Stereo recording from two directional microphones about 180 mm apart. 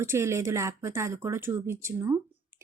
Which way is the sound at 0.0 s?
15° right (ahead or behind).